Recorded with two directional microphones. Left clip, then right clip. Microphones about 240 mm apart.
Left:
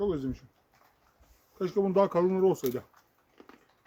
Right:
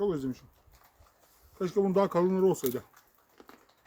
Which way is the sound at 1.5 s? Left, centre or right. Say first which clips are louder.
Left 1 dB; centre.